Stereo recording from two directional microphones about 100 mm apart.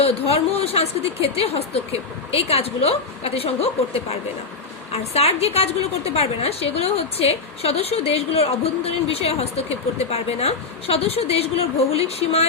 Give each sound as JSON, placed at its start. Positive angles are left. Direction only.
{"t": 0.0, "sound": "a woman's voice", "side_deg": 90}